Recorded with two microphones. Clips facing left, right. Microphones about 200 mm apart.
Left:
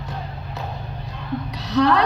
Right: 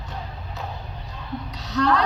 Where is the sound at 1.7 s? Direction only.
60° left (ahead or behind).